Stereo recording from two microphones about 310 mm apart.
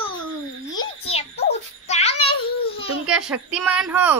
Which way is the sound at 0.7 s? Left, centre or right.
Centre.